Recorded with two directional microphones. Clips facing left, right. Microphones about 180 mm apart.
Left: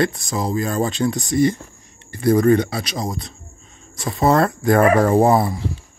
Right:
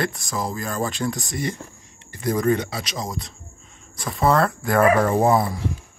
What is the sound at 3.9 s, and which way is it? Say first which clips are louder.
Speech: left 3 dB; 25° left (ahead or behind).